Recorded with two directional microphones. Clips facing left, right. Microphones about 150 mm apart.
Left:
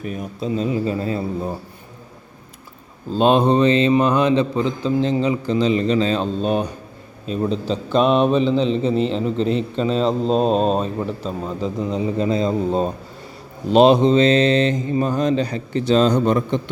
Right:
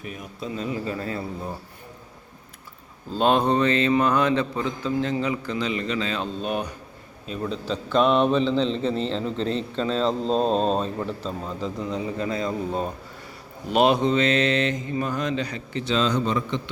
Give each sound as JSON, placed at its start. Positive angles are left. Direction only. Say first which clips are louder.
{"t": 0.0, "sound": "mantra", "louder": "left 8 dB", "side_deg": 40}
{"t": 0.3, "sound": "a man's voice", "louder": "left 7 dB", "side_deg": 25}
{"t": 3.1, "sound": "a man's voice", "louder": "left 5 dB", "side_deg": 20}
{"t": 13.7, "sound": "mantra", "louder": "left 7 dB", "side_deg": 25}